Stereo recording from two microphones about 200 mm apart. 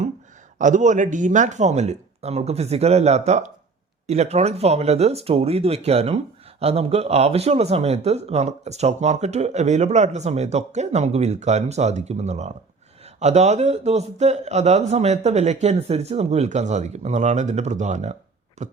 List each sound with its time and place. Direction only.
0.6 s speech: 35° right (ahead or behind)